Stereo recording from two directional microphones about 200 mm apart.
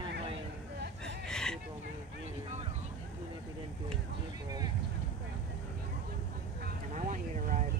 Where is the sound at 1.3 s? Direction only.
5° left (ahead or behind).